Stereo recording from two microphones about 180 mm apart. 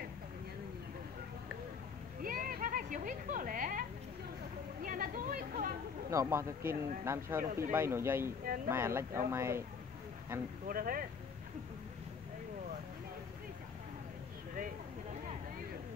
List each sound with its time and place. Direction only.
2.2 s a sound: 50° right (ahead or behind)
4.8 s speech: 50° right (ahead or behind)
6.0 s speech: 15° right (ahead or behind)
10.7 s speech: 50° right (ahead or behind)